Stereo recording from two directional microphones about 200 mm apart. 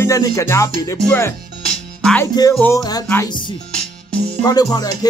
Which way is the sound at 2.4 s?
20° left (ahead or behind).